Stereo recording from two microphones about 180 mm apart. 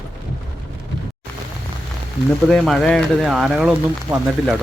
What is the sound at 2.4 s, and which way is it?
Speech, centre (ahead or behind).